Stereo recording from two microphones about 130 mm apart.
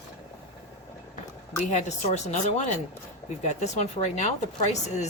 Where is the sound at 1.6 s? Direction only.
65° left (ahead or behind).